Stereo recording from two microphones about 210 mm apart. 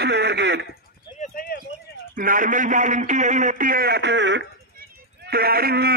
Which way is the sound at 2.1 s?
40° right (ahead or behind).